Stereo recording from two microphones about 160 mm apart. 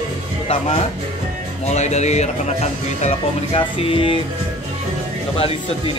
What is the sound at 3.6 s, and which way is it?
Speech, 30° left (ahead or behind).